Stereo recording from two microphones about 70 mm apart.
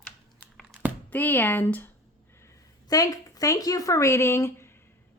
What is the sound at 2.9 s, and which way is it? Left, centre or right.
Speech, left.